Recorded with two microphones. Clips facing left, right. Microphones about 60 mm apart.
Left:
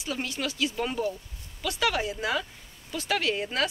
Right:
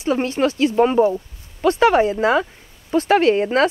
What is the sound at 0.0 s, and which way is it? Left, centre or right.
Speech, right.